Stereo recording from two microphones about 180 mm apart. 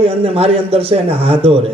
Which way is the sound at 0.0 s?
35° right (ahead or behind).